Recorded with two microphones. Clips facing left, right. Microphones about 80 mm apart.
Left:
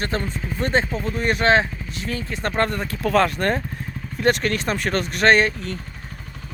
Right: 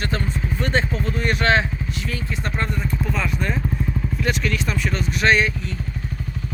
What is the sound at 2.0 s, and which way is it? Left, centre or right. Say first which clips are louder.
Speech: left 4 dB; left.